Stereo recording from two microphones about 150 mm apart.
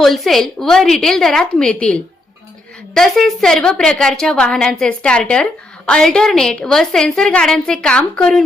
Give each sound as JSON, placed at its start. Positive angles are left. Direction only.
{"t": 0.0, "sound": "a woman's voice", "side_deg": 0}